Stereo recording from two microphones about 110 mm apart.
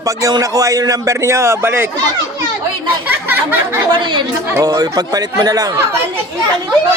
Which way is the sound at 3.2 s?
20° right (ahead or behind).